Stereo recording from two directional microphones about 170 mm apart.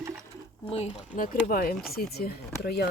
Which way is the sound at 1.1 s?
55° left (ahead or behind).